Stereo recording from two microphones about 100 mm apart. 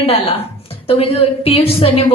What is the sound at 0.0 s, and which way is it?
A woman's voice, 75° left (ahead or behind).